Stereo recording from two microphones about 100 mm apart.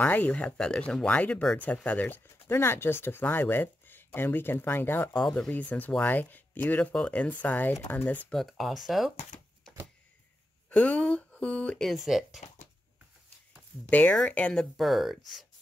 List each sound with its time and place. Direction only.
0.0 s speech: 15° left (ahead or behind)
8.3 s speech: centre (ahead or behind)
9.3 s a sound: 15° left (ahead or behind)
10.7 s speech: 15° left (ahead or behind)
11.9 s speech: centre (ahead or behind)
13.8 s speech: 15° left (ahead or behind); by 15.4 s centre (ahead or behind)